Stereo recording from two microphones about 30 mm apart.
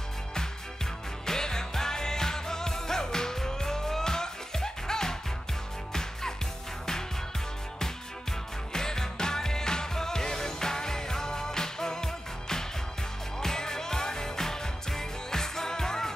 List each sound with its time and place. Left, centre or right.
1.2 s music: centre
7.8 s music: centre